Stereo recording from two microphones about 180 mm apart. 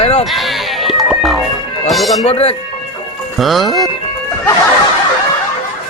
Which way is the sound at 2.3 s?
35° left (ahead or behind).